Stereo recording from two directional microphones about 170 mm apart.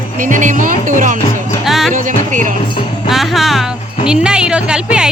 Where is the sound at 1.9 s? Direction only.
50° right (ahead or behind).